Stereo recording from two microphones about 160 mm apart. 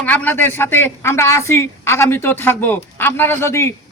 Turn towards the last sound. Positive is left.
turn(degrees=15)  # may be behind; listen again after turning